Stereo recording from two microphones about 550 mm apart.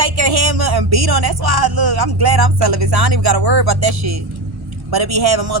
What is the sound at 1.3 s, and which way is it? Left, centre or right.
Music, right.